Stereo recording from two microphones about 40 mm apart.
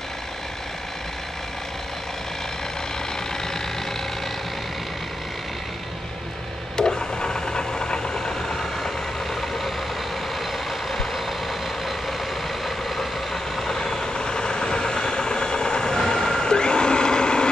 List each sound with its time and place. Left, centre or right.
6.8 s a sound: centre
8.4 s vehicle: centre
12.6 s vehicle: centre; by 17.5 s left